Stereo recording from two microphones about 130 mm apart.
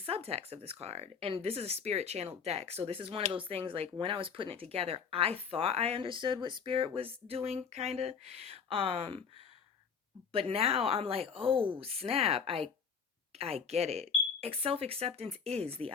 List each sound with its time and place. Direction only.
0.0 s speech: 50° right (ahead or behind)
10.3 s speech: 50° right (ahead or behind)